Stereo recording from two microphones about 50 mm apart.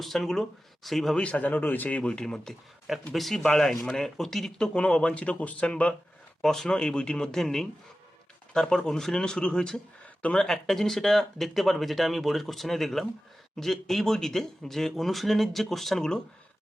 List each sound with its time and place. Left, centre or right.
0.0 s speech: centre
1.1 s a man's voice: left; by 2.6 s centre
2.8 s speech: centre; by 5.9 s left
6.4 s speech: centre